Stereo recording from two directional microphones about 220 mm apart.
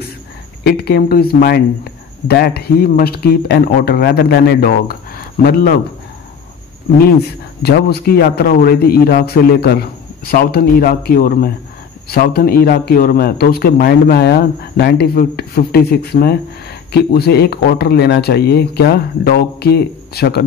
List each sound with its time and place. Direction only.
0.7 s a man's voice: 45° left (ahead or behind)
7.6 s a man's voice: 45° left (ahead or behind)